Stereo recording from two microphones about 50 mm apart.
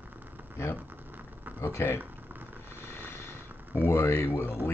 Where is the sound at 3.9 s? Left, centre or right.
Left.